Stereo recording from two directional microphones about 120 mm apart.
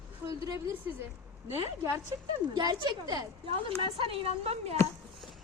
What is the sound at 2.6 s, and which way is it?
Speech, 35° right (ahead or behind).